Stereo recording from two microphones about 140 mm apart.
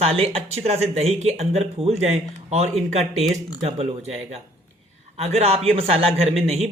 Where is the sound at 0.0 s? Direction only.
45° right (ahead or behind).